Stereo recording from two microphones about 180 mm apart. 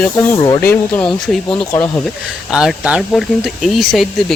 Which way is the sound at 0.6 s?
10° left (ahead or behind).